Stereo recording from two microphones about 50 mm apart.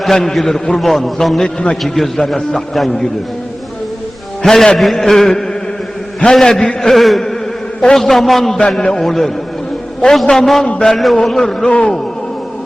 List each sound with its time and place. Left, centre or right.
0.0 s a man's voice: centre
4.4 s a man's voice: centre